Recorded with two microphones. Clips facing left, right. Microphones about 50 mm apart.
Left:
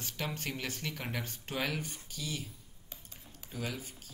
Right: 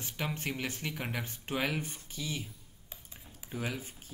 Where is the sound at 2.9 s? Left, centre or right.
Centre.